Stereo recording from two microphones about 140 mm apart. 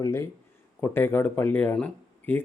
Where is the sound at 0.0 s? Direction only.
20° left (ahead or behind).